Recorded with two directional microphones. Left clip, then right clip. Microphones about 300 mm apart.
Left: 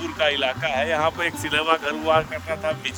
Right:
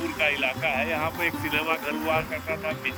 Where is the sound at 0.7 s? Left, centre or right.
Left.